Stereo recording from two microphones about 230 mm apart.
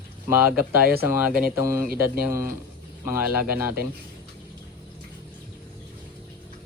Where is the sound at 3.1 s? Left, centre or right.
Centre.